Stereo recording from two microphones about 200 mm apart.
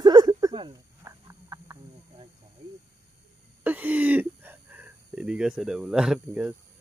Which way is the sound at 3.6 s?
10° right (ahead or behind).